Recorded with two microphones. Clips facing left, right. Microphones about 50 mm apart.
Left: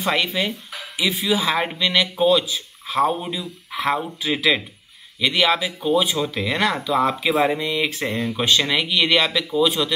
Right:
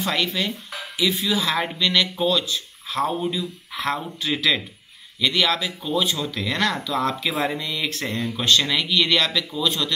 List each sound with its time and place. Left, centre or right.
0.0 s speech: centre